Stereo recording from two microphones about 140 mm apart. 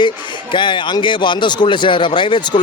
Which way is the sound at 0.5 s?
35° left (ahead or behind).